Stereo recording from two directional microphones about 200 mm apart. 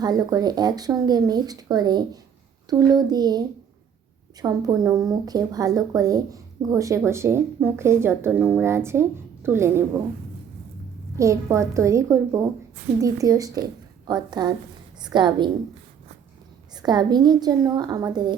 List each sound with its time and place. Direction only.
0.0 s speech: 20° right (ahead or behind)
11.2 s speech: 15° right (ahead or behind)
16.7 s speech: 20° right (ahead or behind)